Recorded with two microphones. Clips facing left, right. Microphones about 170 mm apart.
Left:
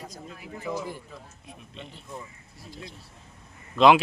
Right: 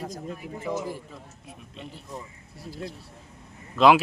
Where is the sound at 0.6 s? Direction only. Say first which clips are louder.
Right 2 dB; 20° right (ahead or behind).